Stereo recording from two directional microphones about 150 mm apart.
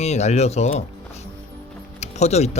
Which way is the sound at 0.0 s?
45° left (ahead or behind).